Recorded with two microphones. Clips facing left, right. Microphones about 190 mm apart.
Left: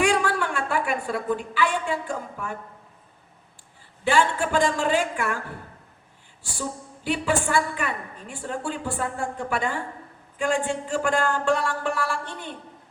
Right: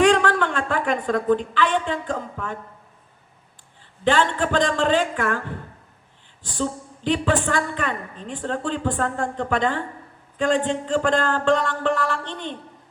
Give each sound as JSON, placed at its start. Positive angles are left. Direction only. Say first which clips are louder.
{"t": 0.0, "sound": "a sound", "louder": "right 5 dB", "side_deg": 10}
{"t": 1.0, "sound": "a woman's voice", "louder": "right 6 dB", "side_deg": 10}
{"t": 4.0, "sound": "a woman's voice", "louder": "right 2 dB", "side_deg": 10}
{"t": 6.4, "sound": "a woman's voice", "louder": "right 6 dB", "side_deg": 10}